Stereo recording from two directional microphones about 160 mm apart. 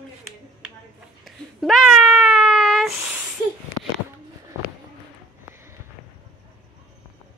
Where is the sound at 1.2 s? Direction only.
Centre (ahead or behind).